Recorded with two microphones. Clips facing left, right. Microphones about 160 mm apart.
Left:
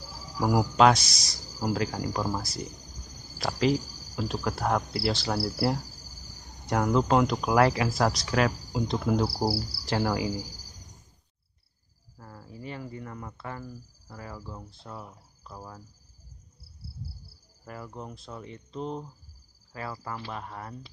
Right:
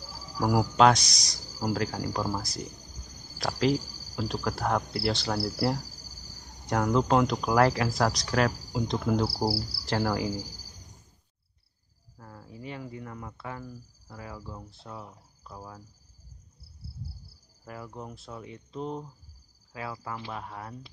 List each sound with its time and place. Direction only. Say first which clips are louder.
0.1 s cricket: left 1 dB; 5° right (ahead or behind)
0.7 s speech: even; 5° left (ahead or behind)
1.7 s cricket: left 1 dB; 10° left (ahead or behind)
2.2 s speech: left 1 dB; centre (ahead or behind)
9.2 s cricket: left 1 dB; 15° left (ahead or behind)
12.2 s cricket: left 1 dB; 5° left (ahead or behind)
13.7 s speech: left 1 dB; 10° left (ahead or behind)
14.1 s speech: even; 5° right (ahead or behind)
17.6 s speech: even; centre (ahead or behind)